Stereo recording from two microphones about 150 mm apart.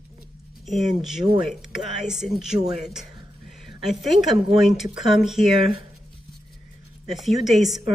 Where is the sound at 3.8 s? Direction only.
Centre (ahead or behind).